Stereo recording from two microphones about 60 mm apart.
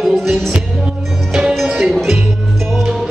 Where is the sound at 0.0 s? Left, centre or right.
Centre.